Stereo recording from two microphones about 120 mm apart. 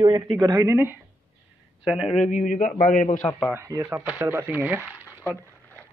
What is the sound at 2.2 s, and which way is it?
A man's voice, 90° left.